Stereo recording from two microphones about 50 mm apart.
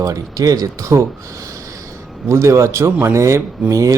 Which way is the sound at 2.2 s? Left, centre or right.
Right.